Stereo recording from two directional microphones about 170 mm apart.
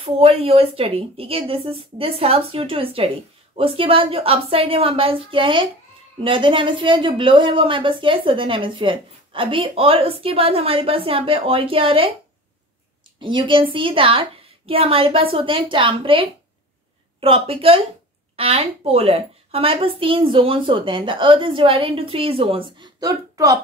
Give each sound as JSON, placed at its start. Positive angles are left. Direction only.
{"t": 0.0, "sound": "speech", "side_deg": -35}
{"t": 13.2, "sound": "speech", "side_deg": -30}